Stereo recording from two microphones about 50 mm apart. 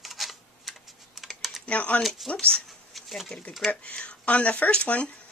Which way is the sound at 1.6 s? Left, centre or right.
Left.